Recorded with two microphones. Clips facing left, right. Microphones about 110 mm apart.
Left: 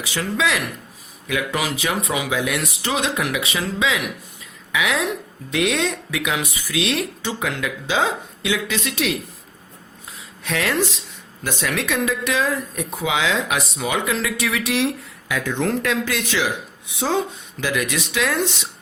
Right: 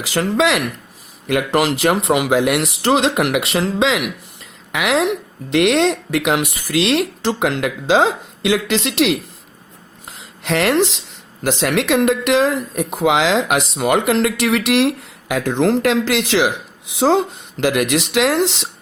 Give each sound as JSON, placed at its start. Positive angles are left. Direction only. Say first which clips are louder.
{"t": 0.0, "sound": "speech", "louder": "right 6 dB", "side_deg": -80}
{"t": 1.3, "sound": "speech", "louder": "right 7 dB", "side_deg": -70}
{"t": 10.1, "sound": "a sound", "louder": "right 6 dB", "side_deg": -80}
{"t": 11.4, "sound": "speech", "louder": "right 7 dB", "side_deg": -90}